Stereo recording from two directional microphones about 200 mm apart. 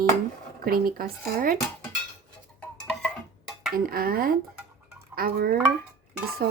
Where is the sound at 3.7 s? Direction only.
45° right (ahead or behind).